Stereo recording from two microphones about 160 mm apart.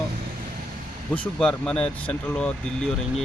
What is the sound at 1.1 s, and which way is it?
Speech, 5° left (ahead or behind).